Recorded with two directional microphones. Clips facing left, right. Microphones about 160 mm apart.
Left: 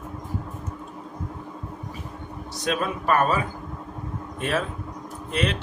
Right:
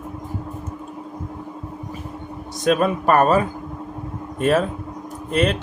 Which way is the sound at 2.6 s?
50° right (ahead or behind).